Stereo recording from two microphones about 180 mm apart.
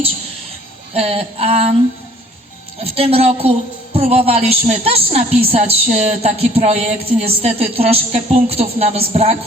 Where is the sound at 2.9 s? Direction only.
30° right (ahead or behind).